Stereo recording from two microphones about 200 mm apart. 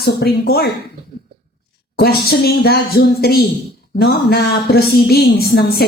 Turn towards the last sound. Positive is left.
turn(degrees=50)  # may be behind; listen again after turning